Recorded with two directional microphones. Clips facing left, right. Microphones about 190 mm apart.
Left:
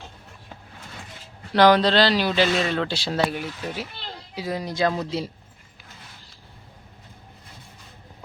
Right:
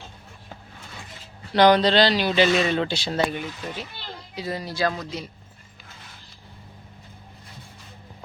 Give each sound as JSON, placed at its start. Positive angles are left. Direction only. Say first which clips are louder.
{"t": 1.5, "sound": "speech", "louder": "even", "side_deg": 0}
{"t": 4.6, "sound": "speech", "louder": "left 3 dB", "side_deg": 20}